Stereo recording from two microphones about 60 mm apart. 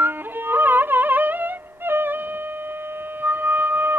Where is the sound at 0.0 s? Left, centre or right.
Right.